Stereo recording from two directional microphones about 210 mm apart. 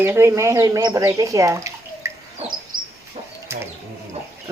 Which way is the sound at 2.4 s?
30° right (ahead or behind).